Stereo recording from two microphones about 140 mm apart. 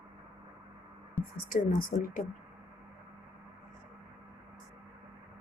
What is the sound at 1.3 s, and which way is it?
Speech, 85° left.